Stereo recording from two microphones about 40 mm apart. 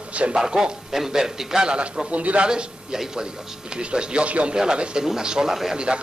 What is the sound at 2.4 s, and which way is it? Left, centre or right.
Speech, centre.